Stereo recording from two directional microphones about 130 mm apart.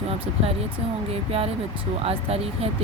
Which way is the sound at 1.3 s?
50° right (ahead or behind).